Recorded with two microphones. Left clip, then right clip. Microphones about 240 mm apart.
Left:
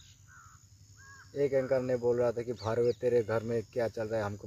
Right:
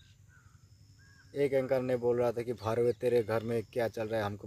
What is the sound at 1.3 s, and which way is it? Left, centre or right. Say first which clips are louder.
Speech: left 1 dB; centre.